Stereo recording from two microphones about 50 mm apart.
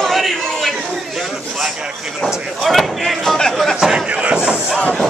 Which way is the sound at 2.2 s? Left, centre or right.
Centre.